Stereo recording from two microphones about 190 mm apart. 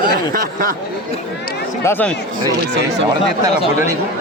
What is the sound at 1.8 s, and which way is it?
Speech, 10° left (ahead or behind).